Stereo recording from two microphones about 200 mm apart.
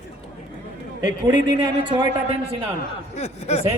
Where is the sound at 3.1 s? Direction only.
35° left (ahead or behind).